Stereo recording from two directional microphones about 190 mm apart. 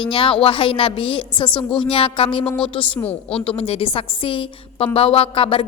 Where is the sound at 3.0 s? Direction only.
5° left (ahead or behind).